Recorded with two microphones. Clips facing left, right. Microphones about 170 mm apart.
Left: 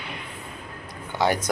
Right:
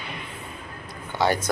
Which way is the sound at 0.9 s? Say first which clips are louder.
Even; 15° left (ahead or behind).